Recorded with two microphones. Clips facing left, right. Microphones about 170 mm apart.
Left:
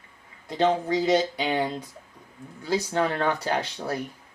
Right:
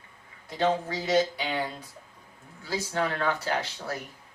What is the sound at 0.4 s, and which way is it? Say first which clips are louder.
Speech: left 3 dB; 20° left (ahead or behind).